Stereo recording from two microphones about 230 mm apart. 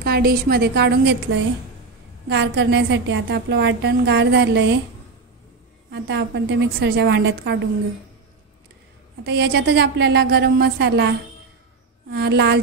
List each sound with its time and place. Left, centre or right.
0.0 s a woman's voice: right
5.9 s a woman's voice: right
9.2 s a woman's voice: right